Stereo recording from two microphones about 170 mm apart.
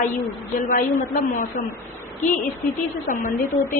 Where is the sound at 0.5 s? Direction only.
50° left (ahead or behind).